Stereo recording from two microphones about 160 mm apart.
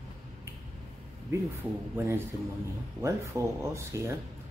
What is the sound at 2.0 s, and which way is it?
Speech, 15° right (ahead or behind).